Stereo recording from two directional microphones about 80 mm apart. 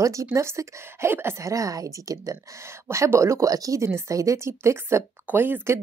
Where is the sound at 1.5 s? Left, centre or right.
Right.